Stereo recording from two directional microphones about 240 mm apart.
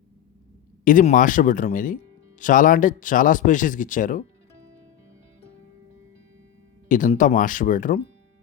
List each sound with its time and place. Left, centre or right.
0.9 s speech: left
6.8 s speech: left